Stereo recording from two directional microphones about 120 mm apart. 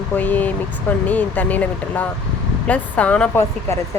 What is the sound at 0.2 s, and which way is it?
Speech, 15° left (ahead or behind).